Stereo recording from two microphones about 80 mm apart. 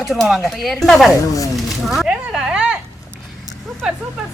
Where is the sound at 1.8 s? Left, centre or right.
Centre.